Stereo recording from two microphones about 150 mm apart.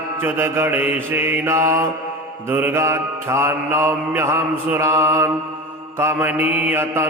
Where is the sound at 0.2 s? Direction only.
15° right (ahead or behind).